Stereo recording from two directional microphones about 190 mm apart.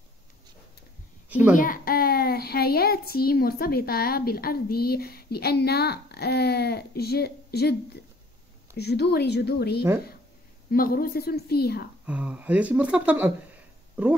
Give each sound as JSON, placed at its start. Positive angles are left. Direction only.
{"t": 1.5, "sound": "a child's voice", "side_deg": 45}
{"t": 12.1, "sound": "speech", "side_deg": -5}